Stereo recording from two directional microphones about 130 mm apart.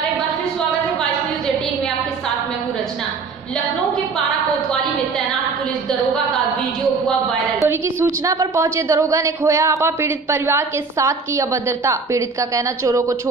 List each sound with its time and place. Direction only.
7.6 s a woman's voice: 20° right (ahead or behind)